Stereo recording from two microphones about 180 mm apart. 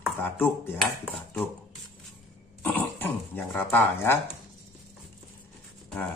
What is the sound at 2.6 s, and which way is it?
Dog, 10° left (ahead or behind).